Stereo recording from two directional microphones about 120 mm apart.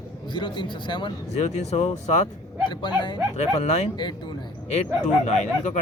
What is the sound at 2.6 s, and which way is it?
Speech, 40° left (ahead or behind).